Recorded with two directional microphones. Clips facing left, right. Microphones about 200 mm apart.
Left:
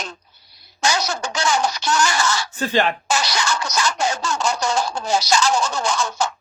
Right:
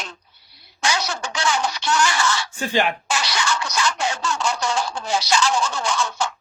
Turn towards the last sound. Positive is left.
turn(degrees=40)  # may be behind; listen again after turning